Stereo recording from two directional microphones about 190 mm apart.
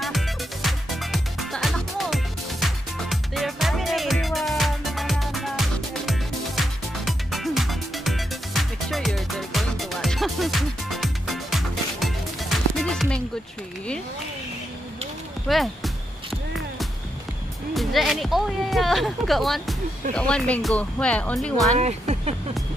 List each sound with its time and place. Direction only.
0.0 s music: centre (ahead or behind)
15.4 s music: centre (ahead or behind)
17.7 s music: centre (ahead or behind)
20.2 s speech: 5° left (ahead or behind)
21.7 s speech: 35° right (ahead or behind)